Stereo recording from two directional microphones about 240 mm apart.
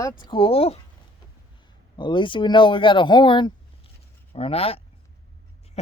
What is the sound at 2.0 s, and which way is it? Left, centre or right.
Speech, centre.